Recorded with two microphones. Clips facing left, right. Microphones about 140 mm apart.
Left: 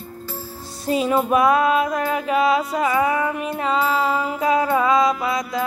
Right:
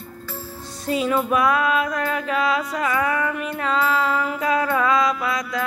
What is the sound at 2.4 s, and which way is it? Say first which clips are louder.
Music: left 5 dB; 25° left (ahead or behind).